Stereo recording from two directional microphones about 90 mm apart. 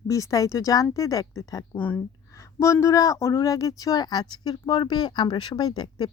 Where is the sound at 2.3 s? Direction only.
35° left (ahead or behind).